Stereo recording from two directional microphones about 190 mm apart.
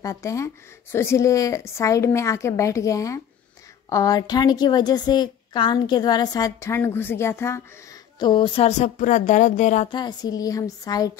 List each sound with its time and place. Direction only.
0.0 s a woman's voice: 15° left (ahead or behind)
8.2 s speech: 25° left (ahead or behind); by 9.8 s 40° left (ahead or behind)
9.8 s a woman's voice: 20° left (ahead or behind)